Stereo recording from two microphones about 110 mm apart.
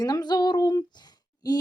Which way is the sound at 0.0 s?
35° left (ahead or behind).